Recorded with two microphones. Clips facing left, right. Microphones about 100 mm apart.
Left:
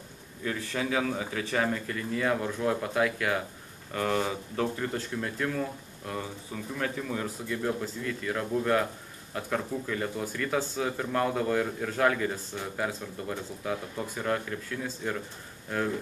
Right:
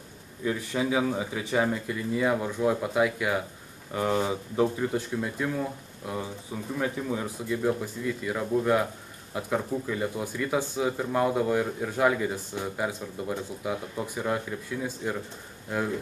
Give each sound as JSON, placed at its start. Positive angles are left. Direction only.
{"t": 0.4, "sound": "speech", "side_deg": -15}